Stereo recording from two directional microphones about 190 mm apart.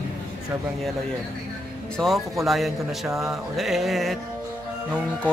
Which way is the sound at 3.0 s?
15° right (ahead or behind).